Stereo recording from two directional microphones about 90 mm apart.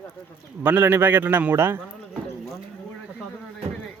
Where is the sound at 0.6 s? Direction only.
20° right (ahead or behind).